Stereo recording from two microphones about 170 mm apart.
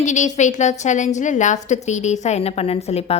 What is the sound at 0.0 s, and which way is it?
A woman's voice, 45° left (ahead or behind).